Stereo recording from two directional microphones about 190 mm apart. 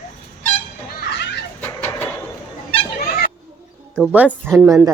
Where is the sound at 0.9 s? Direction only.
65° left (ahead or behind).